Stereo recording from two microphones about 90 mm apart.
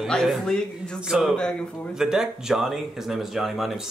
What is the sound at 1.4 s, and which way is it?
Speech, 10° left (ahead or behind).